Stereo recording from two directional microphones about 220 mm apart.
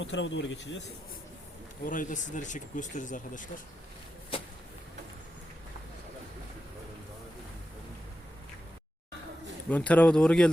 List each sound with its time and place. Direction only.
0.0 s speech: 55° left (ahead or behind)
1.8 s speech: 35° left (ahead or behind)
9.6 s speech: 5° left (ahead or behind)